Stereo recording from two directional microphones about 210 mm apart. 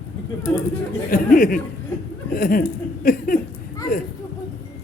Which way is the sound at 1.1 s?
45° left (ahead or behind).